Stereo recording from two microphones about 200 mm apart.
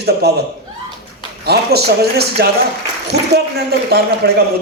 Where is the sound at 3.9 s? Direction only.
50° right (ahead or behind).